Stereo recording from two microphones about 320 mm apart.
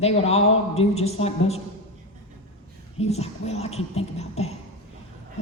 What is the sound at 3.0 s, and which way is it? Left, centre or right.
A woman's voice, centre.